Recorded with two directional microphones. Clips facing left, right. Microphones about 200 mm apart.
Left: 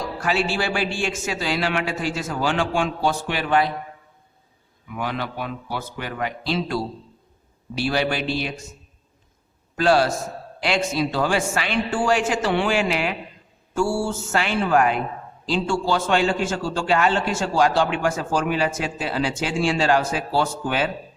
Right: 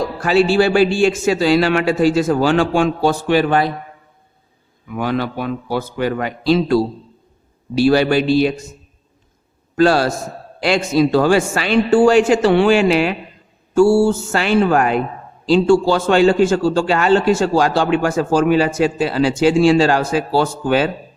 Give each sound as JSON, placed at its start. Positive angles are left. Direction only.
{"t": 0.2, "sound": "a man's voice", "side_deg": -30}
{"t": 4.9, "sound": "a man's voice", "side_deg": -40}
{"t": 9.7, "sound": "a man's voice", "side_deg": -40}
{"t": 13.8, "sound": "mantra", "side_deg": -85}
{"t": 14.1, "sound": "a man's voice", "side_deg": -35}